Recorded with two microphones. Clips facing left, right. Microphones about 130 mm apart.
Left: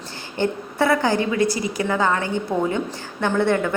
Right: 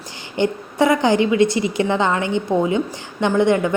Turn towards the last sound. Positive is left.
turn(degrees=-15)  # may be behind; listen again after turning